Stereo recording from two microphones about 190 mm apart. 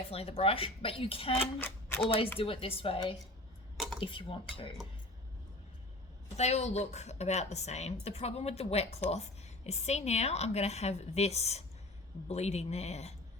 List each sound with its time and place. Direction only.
0.1 s speech: 30° left (ahead or behind)
1.5 s speech: 10° left (ahead or behind)
2.0 s speech: 30° left (ahead or behind)
3.8 s a sound: centre (ahead or behind)
4.0 s speech: 25° left (ahead or behind)
6.3 s a woman's voice: 35° left (ahead or behind)